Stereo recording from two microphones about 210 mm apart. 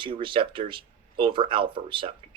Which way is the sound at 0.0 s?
25° right (ahead or behind).